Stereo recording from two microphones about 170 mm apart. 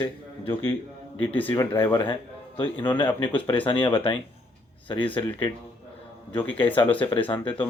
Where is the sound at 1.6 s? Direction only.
25° left (ahead or behind).